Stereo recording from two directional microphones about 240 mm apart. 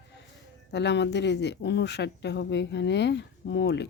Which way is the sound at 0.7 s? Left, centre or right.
Left.